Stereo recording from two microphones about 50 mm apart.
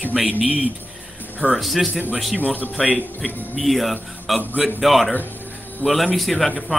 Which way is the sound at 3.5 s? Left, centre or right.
Centre.